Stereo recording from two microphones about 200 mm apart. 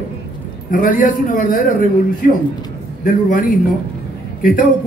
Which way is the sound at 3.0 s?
40° left (ahead or behind).